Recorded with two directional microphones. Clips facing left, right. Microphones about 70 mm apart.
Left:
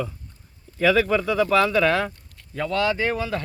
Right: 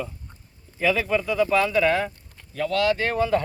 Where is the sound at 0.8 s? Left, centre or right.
Left.